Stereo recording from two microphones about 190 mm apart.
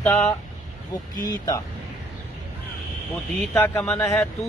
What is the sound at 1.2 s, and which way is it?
Speech, 20° left (ahead or behind).